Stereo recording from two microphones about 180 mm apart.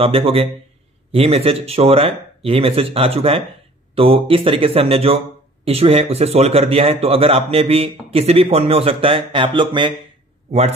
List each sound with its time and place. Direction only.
0.0 s a man's voice: 30° right (ahead or behind)